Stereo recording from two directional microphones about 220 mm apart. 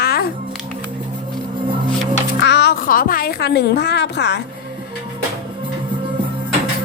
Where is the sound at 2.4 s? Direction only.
50° left (ahead or behind).